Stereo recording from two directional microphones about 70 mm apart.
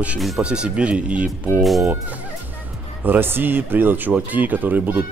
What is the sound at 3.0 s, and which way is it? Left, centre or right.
Speech, right.